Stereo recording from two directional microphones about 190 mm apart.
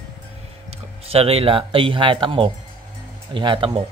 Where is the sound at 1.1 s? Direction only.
30° right (ahead or behind).